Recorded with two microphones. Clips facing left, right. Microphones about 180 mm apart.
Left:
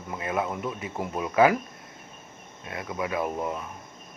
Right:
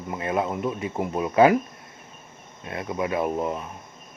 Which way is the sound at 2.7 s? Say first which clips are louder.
Right 4 dB; 30° right (ahead or behind).